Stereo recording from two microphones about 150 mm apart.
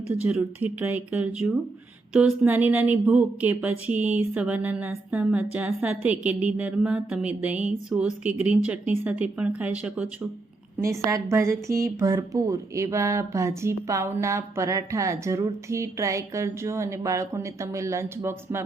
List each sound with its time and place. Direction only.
0.1 s a woman's voice: 10° right (ahead or behind)